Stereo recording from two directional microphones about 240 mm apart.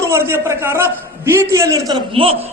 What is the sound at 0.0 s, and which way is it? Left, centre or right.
A man's voice, centre.